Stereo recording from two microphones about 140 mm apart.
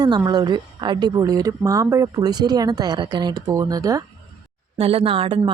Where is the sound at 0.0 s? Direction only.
25° right (ahead or behind).